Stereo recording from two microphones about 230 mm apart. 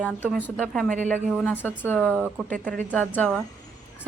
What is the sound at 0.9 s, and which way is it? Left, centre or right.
Speech, right.